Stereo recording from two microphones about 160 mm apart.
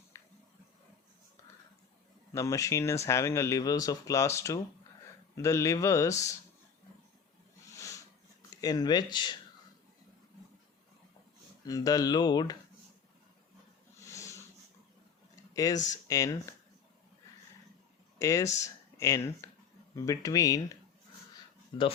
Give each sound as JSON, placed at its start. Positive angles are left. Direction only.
{"t": 0.1, "sound": "a sound", "side_deg": 20}
{"t": 2.3, "sound": "speech", "side_deg": 20}
{"t": 7.7, "sound": "a sound", "side_deg": 20}
{"t": 11.6, "sound": "speech", "side_deg": 25}
{"t": 14.0, "sound": "wheeze", "side_deg": 20}
{"t": 15.5, "sound": "speech", "side_deg": 20}
{"t": 18.2, "sound": "speech", "side_deg": 20}
{"t": 18.4, "sound": "speech", "side_deg": 45}
{"t": 18.9, "sound": "speech", "side_deg": 20}
{"t": 21.7, "sound": "speech", "side_deg": 35}